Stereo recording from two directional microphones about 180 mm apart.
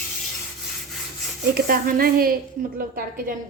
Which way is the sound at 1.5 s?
55° right (ahead or behind).